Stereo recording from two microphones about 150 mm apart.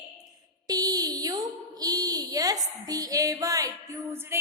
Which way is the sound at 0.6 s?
25° right (ahead or behind).